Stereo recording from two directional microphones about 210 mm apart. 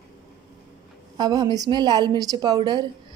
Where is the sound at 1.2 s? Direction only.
20° right (ahead or behind).